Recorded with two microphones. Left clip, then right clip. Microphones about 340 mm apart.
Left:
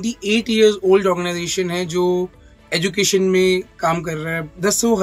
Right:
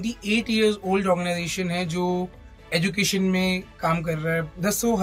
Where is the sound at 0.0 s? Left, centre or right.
Centre.